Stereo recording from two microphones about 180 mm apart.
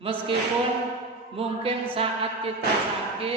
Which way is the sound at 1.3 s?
30° right (ahead or behind).